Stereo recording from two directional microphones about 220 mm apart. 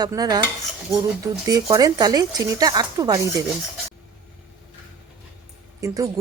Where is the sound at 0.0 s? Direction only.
15° right (ahead or behind).